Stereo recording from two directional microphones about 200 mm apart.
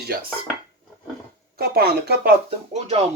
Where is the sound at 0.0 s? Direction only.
45° right (ahead or behind).